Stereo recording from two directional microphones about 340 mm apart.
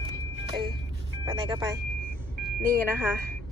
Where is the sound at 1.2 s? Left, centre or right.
Centre.